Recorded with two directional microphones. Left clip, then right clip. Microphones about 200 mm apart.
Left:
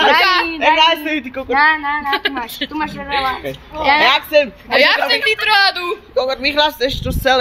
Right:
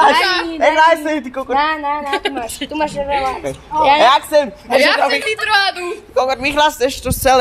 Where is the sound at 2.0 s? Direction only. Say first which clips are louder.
Left 1 dB; 15° left (ahead or behind).